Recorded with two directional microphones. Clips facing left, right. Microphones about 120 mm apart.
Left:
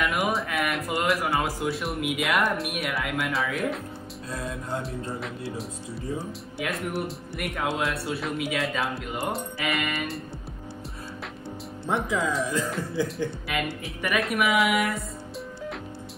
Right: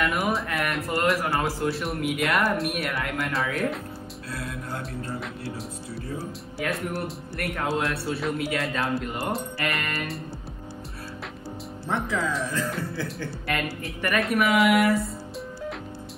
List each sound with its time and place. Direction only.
0.0 s speech: centre (ahead or behind)
4.3 s music: 25° left (ahead or behind)
6.6 s speech: centre (ahead or behind)
11.9 s music: 20° left (ahead or behind)
13.0 s speech: 15° left (ahead or behind)
13.5 s speech: centre (ahead or behind)